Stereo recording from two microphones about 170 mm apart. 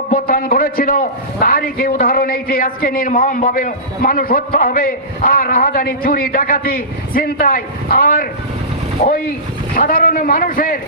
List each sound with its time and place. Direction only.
0.1 s a man's voice: 55° left (ahead or behind)
9.8 s a man's voice: 55° left (ahead or behind)